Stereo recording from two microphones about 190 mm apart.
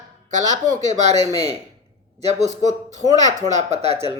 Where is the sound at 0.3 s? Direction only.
40° right (ahead or behind).